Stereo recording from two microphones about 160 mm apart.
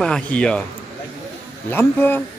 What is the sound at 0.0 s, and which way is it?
Speech, 5° left (ahead or behind).